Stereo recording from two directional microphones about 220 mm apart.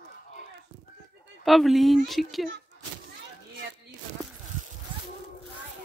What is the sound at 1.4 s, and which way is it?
Speech, centre (ahead or behind).